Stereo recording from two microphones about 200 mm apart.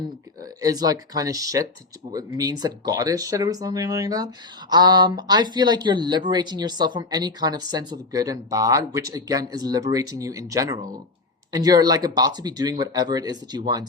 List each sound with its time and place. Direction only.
0.6 s speech: 20° right (ahead or behind)